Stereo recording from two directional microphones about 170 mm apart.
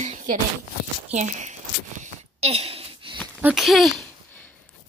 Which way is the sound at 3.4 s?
5° right (ahead or behind).